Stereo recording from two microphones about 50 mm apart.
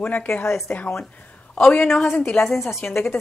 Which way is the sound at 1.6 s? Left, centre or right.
Centre.